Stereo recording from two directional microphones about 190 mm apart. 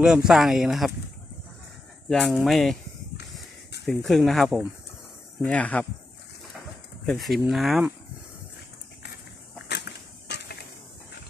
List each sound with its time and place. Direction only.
0.0 s speech: 5° right (ahead or behind)
2.0 s speech: centre (ahead or behind)
3.8 s speech: centre (ahead or behind)
7.1 s speech: centre (ahead or behind)
9.7 s a sound: 65° left (ahead or behind)